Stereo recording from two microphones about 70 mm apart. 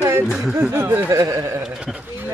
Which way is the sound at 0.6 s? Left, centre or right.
Right.